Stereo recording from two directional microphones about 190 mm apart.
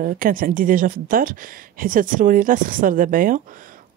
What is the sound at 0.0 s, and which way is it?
Speech, 50° right (ahead or behind).